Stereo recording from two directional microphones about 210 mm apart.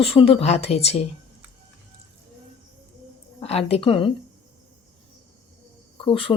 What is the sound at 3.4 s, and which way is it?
Speech, 30° left (ahead or behind).